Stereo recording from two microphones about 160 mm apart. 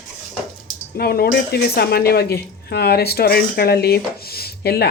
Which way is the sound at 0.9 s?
75° left (ahead or behind).